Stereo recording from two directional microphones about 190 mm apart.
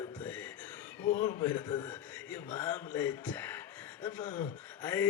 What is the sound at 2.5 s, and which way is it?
A man's voice, 10° left (ahead or behind).